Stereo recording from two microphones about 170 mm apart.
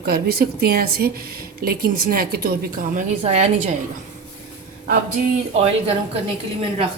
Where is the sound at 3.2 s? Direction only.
45° right (ahead or behind).